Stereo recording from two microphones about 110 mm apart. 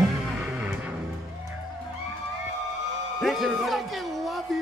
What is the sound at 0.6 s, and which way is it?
Music, 15° right (ahead or behind).